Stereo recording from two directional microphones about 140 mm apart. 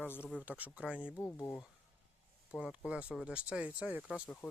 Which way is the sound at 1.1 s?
15° left (ahead or behind).